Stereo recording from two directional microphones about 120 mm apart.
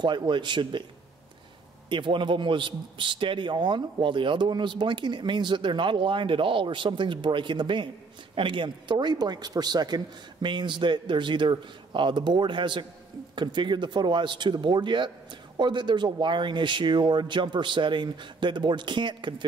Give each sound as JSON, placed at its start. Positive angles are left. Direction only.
{"t": 0.0, "sound": "a man's voice", "side_deg": -40}
{"t": 1.9, "sound": "a man's voice", "side_deg": -40}